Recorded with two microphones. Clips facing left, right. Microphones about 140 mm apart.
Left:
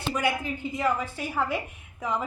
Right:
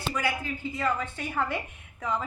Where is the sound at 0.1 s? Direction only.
20° left (ahead or behind).